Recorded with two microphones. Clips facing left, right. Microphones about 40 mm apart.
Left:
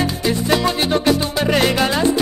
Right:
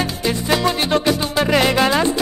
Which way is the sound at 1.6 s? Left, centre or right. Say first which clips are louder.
Right 1 dB; right.